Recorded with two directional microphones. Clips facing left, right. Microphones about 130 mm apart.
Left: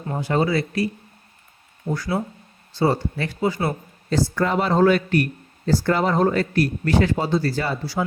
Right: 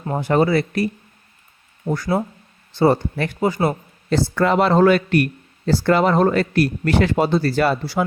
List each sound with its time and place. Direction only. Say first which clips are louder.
0.1 s speech: right 4 dB; 55° right (ahead or behind)
1.9 s speech: right 4 dB; 50° right (ahead or behind)
4.1 s speech: right 3 dB; 75° right (ahead or behind)